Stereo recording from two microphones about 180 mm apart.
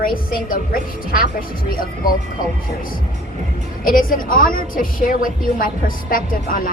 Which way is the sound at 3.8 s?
50° left (ahead or behind).